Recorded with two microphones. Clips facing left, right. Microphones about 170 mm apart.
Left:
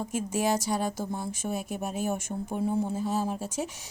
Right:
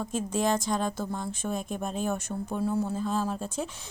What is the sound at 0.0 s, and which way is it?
Speech, 10° left (ahead or behind).